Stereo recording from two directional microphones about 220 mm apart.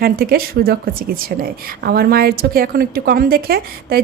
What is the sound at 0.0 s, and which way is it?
A woman's voice, 45° right (ahead or behind).